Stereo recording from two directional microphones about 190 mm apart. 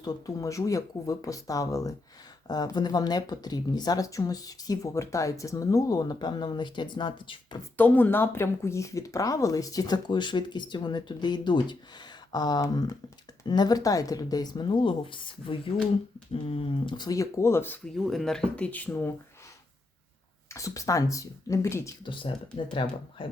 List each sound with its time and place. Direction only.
0.0 s speech: 20° left (ahead or behind)
7.8 s speech: 10° left (ahead or behind)
20.5 s speech: 15° left (ahead or behind)
22.0 s speech: 25° left (ahead or behind)